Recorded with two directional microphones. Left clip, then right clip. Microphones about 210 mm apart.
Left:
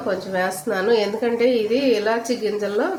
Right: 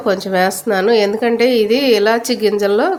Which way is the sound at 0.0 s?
50° right (ahead or behind).